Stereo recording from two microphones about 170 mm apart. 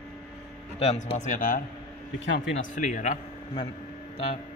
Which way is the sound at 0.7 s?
40° left (ahead or behind).